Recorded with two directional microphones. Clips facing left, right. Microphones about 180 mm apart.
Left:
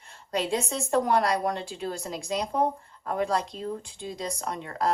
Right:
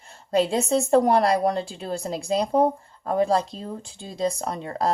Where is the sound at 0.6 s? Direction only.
30° right (ahead or behind).